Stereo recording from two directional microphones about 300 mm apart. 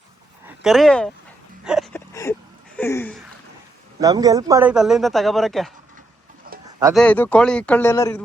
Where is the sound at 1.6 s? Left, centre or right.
Centre.